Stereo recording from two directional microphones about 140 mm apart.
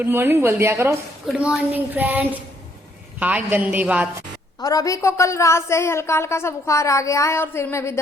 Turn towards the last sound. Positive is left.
turn(degrees=20)  # may be behind; listen again after turning